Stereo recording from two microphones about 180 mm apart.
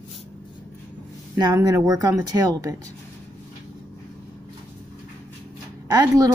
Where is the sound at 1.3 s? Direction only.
20° right (ahead or behind).